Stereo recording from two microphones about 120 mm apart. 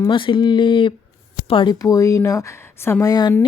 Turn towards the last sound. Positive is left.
turn(degrees=35)  # may be behind; listen again after turning